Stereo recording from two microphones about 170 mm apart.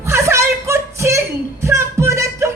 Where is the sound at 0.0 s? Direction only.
15° right (ahead or behind).